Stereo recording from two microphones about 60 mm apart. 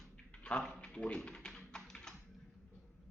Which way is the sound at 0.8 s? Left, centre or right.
Centre.